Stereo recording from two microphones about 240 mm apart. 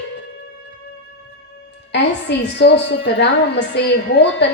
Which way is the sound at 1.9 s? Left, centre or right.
Left.